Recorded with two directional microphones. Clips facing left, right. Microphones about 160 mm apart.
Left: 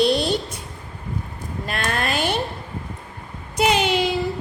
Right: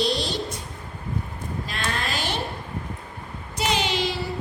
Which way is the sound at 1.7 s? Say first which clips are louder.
Left 6 dB; 60° left (ahead or behind).